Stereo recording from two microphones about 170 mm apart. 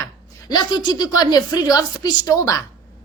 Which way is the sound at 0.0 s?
20° left (ahead or behind).